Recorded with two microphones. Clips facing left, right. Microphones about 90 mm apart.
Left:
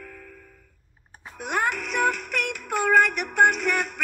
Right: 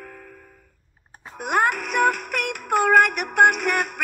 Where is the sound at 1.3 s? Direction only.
55° right (ahead or behind).